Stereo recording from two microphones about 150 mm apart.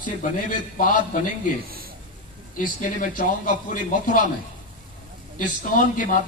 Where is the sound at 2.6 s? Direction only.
65° left (ahead or behind).